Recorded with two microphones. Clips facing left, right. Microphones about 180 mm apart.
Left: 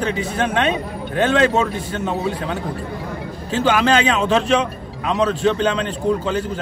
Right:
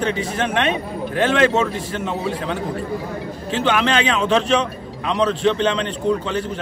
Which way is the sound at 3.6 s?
35° left (ahead or behind).